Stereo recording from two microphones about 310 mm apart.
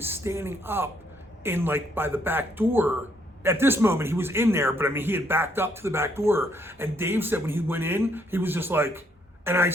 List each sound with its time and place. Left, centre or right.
0.0 s speech: centre